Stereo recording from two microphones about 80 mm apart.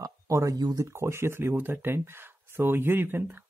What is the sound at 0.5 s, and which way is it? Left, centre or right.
Speech, right.